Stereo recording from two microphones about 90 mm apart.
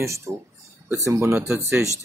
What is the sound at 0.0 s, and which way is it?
Speech, 35° right (ahead or behind).